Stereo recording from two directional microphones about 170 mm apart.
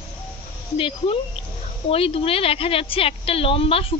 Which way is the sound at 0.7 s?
30° left (ahead or behind).